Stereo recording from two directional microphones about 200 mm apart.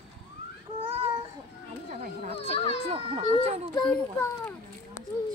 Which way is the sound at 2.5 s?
30° left (ahead or behind).